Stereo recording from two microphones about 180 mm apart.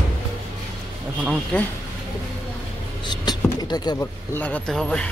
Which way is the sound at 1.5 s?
5° left (ahead or behind).